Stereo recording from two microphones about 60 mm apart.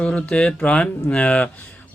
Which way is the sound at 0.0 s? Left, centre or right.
Centre.